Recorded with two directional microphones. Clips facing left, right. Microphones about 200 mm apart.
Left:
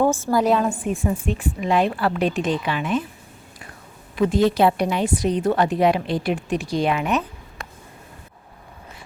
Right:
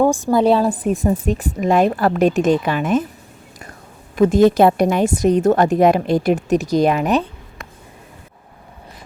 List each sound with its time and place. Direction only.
0.0 s a woman's voice: 15° right (ahead or behind); by 3.1 s 45° right (ahead or behind)
4.1 s a woman's voice: 45° right (ahead or behind)